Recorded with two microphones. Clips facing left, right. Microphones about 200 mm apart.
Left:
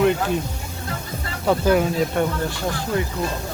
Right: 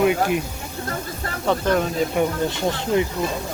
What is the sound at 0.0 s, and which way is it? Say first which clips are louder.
Speech: even; 10° right (ahead or behind).